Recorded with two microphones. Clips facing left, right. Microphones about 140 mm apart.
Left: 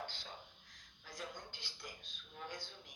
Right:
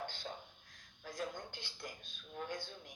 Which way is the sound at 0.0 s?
50° right (ahead or behind).